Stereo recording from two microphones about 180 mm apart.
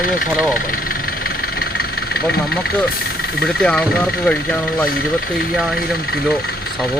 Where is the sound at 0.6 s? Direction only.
50° left (ahead or behind).